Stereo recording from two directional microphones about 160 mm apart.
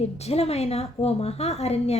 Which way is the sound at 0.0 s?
40° left (ahead or behind).